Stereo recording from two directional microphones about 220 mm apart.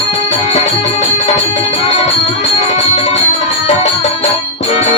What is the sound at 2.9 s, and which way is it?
Music, 30° left (ahead or behind).